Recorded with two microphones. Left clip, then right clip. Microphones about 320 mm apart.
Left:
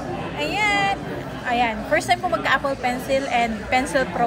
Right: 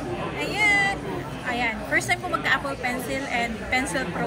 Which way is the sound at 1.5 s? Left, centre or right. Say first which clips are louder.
Left 4 dB; centre.